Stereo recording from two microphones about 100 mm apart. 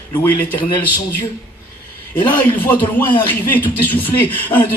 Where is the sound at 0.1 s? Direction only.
20° left (ahead or behind).